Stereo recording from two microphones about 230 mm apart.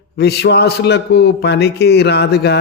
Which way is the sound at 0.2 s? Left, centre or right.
Left.